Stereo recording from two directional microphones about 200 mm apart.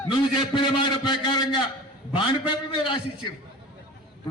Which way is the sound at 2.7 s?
25° left (ahead or behind).